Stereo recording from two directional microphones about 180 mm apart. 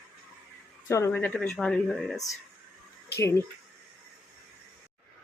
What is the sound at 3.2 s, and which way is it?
Speech, 15° left (ahead or behind).